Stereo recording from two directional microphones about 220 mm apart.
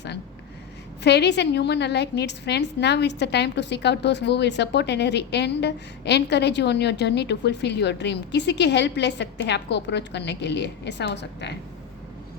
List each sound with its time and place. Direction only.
1.0 s a woman's voice: 50° left (ahead or behind)